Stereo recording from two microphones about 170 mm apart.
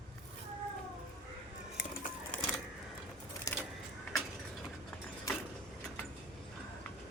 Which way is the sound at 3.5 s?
20° left (ahead or behind).